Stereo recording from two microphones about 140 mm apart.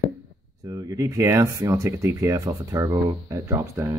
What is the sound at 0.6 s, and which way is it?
Speech, 25° right (ahead or behind).